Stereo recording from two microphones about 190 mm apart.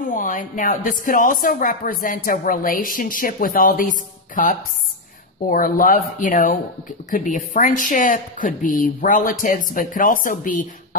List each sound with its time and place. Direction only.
0.0 s speech: 45° left (ahead or behind)